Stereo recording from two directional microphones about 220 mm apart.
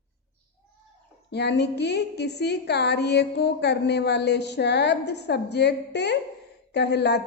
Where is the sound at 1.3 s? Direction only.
50° left (ahead or behind).